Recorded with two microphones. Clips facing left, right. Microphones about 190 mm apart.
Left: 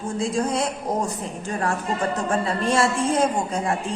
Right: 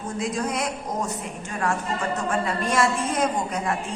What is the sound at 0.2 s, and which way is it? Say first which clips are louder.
A woman's voice: left 3 dB; 30° left (ahead or behind).